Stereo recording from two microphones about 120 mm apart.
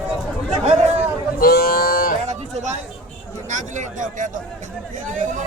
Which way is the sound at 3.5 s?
90° right.